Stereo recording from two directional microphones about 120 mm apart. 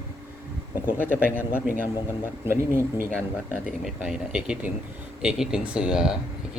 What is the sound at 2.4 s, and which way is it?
Speech, 20° right (ahead or behind).